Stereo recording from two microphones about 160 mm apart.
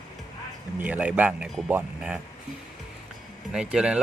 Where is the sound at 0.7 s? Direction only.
10° right (ahead or behind).